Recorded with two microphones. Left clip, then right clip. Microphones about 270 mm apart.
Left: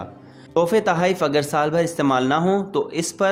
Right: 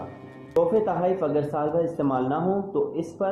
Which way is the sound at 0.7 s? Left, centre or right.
Left.